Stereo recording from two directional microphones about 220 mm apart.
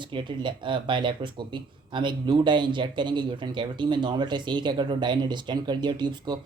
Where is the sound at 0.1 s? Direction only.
20° right (ahead or behind).